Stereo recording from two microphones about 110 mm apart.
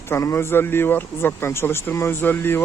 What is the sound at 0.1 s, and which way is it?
Speech, 25° left (ahead or behind).